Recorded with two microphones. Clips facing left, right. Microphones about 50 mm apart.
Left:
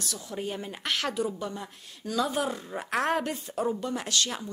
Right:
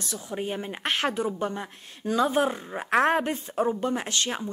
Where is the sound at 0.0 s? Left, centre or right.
Right.